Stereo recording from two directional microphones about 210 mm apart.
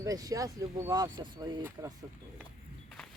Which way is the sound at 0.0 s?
15° right (ahead or behind).